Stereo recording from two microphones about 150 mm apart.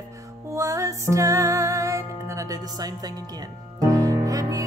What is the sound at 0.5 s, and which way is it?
Music, 20° right (ahead or behind).